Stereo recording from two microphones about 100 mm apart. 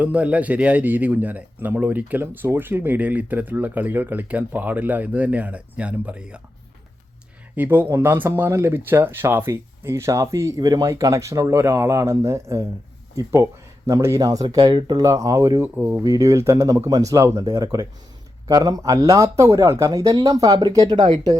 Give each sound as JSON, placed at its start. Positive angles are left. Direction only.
{"t": 0.0, "sound": "a man's voice", "side_deg": -15}
{"t": 7.5, "sound": "speech", "side_deg": -20}
{"t": 15.0, "sound": "speech", "side_deg": -35}
{"t": 15.6, "sound": "speech", "side_deg": -20}